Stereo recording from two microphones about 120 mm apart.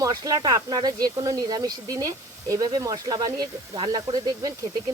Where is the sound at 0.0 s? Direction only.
30° right (ahead or behind).